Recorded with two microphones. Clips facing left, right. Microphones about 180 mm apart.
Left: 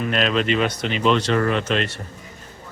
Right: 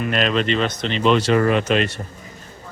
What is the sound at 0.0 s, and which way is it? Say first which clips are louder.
Speech: right 1 dB; centre (ahead or behind).